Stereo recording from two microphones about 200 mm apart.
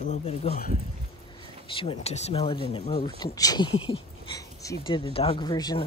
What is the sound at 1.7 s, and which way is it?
Speech, 25° left (ahead or behind).